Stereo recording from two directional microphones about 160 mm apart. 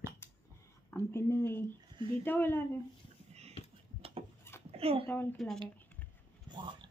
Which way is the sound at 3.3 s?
40° right (ahead or behind).